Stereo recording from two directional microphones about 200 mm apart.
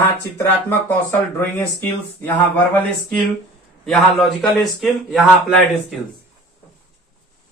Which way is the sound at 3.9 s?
Centre (ahead or behind).